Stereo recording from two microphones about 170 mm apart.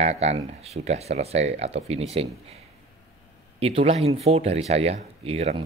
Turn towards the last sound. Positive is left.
turn(degrees=-35)  # may be behind; listen again after turning